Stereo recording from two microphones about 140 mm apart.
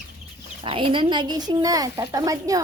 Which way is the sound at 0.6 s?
40° right (ahead or behind).